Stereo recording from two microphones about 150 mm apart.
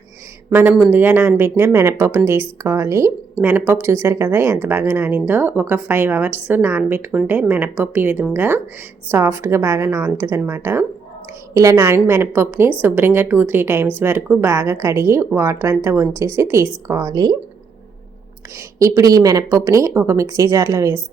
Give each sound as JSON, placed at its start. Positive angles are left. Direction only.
{"t": 0.5, "sound": "speech", "side_deg": -15}
{"t": 18.8, "sound": "speech", "side_deg": -20}